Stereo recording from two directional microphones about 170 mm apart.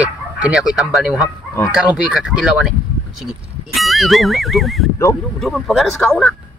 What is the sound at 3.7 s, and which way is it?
Speech, centre (ahead or behind).